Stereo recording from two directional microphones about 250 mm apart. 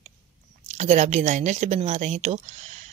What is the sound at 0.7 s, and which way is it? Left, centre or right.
Speech, right.